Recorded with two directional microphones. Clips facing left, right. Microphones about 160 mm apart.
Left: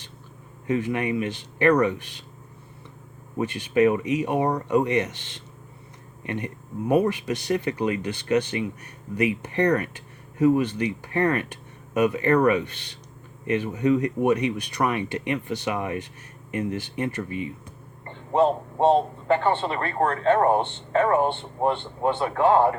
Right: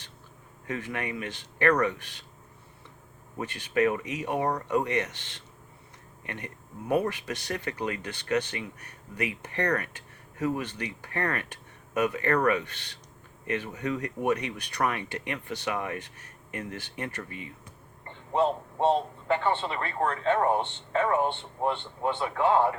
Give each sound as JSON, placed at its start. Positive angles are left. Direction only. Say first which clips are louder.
{"t": 0.7, "sound": "speech", "louder": "left 9 dB", "side_deg": 20}
{"t": 3.3, "sound": "speech", "louder": "left 6 dB", "side_deg": 20}
{"t": 18.3, "sound": "a man's voice", "louder": "left 5 dB", "side_deg": 55}